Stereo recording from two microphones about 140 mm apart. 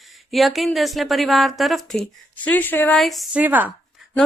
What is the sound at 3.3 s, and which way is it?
Speech, 10° right (ahead or behind).